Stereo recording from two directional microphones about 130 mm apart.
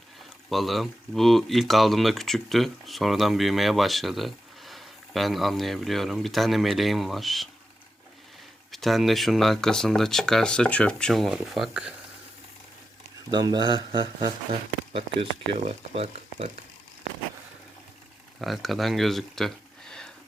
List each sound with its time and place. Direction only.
0.5 s speech: centre (ahead or behind)
8.7 s speech: centre (ahead or behind)
13.3 s speech: 35° right (ahead or behind)
14.9 s speech: 50° right (ahead or behind)
18.3 s speech: centre (ahead or behind)